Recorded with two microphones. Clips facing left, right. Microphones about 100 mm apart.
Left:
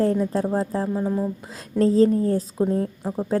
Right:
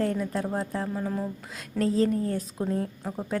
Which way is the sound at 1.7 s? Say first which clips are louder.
Left 7 dB; 30° left (ahead or behind).